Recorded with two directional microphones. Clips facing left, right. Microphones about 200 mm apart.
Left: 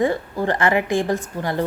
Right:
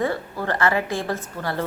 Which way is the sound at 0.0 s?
15° left (ahead or behind).